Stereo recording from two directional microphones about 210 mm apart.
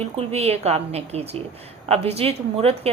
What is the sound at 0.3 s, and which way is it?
A woman's voice, 30° right (ahead or behind).